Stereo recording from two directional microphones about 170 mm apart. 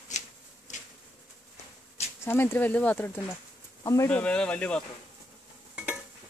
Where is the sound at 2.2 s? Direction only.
15° left (ahead or behind).